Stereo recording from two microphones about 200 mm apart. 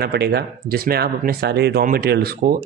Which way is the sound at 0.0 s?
55° right (ahead or behind).